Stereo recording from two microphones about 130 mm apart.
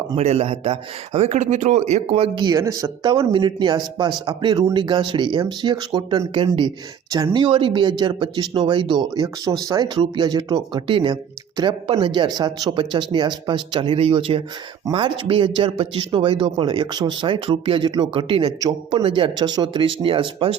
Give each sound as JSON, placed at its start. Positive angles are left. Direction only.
{"t": 0.2, "sound": "a man's voice", "side_deg": -55}
{"t": 2.6, "sound": "speech", "side_deg": -25}
{"t": 7.4, "sound": "speech", "side_deg": -40}